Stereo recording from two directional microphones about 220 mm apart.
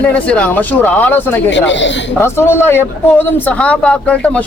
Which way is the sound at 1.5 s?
55° left (ahead or behind).